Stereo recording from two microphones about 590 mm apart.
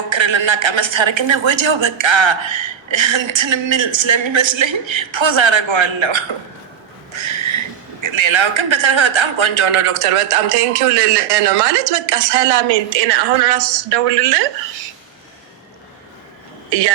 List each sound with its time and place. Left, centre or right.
0.1 s a woman's voice: right
7.1 s a sound: right
8.0 s a man's voice: right
16.6 s speech: right